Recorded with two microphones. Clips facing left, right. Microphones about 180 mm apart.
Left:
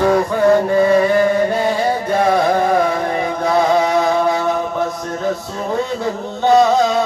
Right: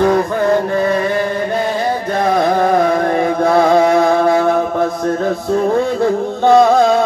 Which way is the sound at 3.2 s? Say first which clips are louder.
Right 3 dB; 55° right (ahead or behind).